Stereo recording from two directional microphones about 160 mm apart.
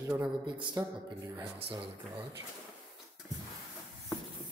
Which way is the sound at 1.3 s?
10° right (ahead or behind).